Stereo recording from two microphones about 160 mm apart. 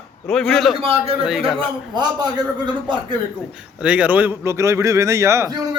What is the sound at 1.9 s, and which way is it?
Speech, 25° right (ahead or behind).